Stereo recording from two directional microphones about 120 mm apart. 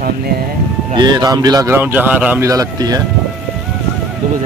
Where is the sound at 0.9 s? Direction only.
35° right (ahead or behind).